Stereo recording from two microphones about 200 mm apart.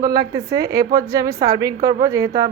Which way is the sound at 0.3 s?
15° right (ahead or behind).